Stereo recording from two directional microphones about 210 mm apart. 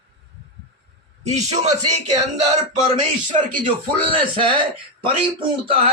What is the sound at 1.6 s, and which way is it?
Speech, 35° right (ahead or behind).